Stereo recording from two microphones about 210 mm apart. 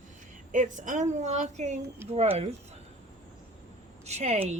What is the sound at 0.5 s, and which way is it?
A woman's voice, 40° right (ahead or behind).